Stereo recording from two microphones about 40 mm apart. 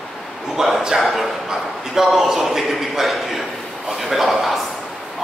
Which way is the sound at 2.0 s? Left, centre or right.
Centre.